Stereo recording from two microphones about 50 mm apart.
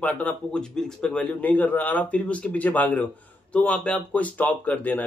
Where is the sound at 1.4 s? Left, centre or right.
Left.